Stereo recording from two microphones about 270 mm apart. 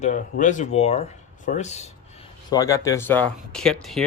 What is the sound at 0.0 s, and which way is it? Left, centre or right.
Speech, left.